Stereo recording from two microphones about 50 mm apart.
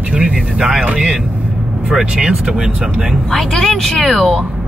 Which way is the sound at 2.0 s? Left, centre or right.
Centre.